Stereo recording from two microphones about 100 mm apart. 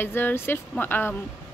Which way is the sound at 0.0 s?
20° left (ahead or behind).